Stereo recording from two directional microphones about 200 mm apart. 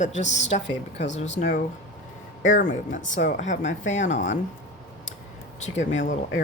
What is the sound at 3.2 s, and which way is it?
Speech, 40° left (ahead or behind).